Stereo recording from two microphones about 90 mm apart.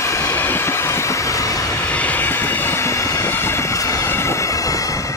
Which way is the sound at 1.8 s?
15° left (ahead or behind).